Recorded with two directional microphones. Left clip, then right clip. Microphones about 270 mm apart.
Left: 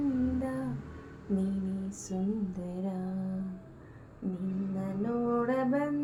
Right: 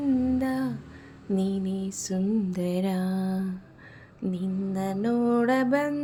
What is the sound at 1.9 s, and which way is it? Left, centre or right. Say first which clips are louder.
Mantra: right 7 dB; right.